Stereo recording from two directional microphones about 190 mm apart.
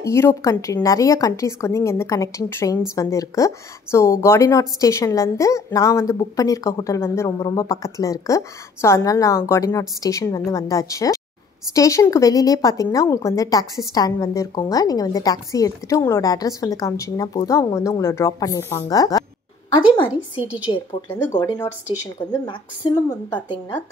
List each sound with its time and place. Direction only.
0.0 s a woman's voice: 15° left (ahead or behind)
20.4 s a woman's voice: 10° right (ahead or behind)
21.4 s a woman's voice: 15° left (ahead or behind)
23.0 s a woman's voice: 25° left (ahead or behind)